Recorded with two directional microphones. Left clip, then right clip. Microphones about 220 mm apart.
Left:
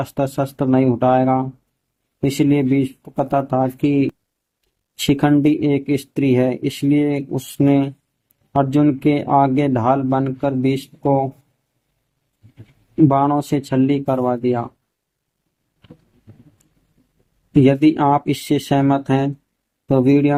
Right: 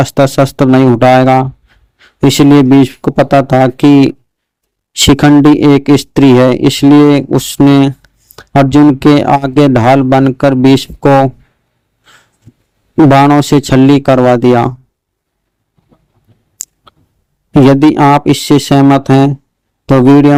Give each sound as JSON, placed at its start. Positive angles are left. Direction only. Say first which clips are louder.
{"t": 0.0, "sound": "speech", "louder": "right 13 dB", "side_deg": -45}
{"t": 13.1, "sound": "speech", "louder": "right 12 dB", "side_deg": -40}
{"t": 17.5, "sound": "speech", "louder": "right 8 dB", "side_deg": -40}